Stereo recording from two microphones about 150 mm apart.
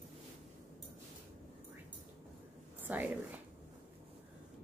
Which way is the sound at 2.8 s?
10° right (ahead or behind).